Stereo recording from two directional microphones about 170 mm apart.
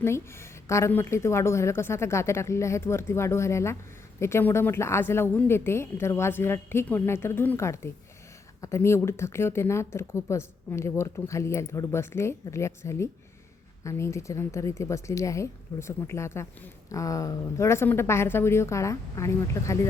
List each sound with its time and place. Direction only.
0.0 s speech: 15° left (ahead or behind)